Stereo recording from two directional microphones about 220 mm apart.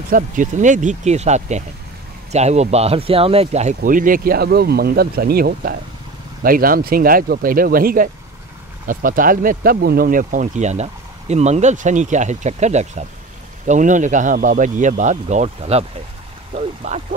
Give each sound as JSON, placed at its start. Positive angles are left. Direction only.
{"t": 0.1, "sound": "speech", "side_deg": -35}